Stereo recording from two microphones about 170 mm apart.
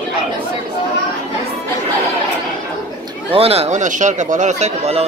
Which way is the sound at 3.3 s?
35° right (ahead or behind).